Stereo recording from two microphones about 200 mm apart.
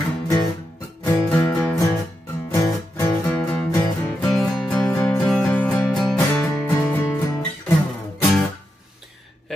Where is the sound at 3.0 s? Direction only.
5° left (ahead or behind).